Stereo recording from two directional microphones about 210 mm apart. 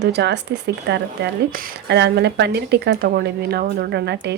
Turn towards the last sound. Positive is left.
turn(degrees=-55)  # may be behind; listen again after turning